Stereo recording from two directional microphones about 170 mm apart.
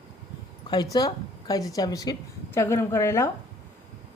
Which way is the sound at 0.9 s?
20° left (ahead or behind).